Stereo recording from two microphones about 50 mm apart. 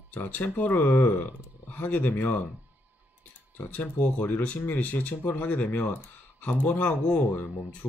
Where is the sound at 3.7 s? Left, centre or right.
Left.